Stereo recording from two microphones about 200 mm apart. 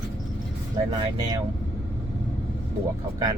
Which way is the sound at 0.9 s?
20° right (ahead or behind).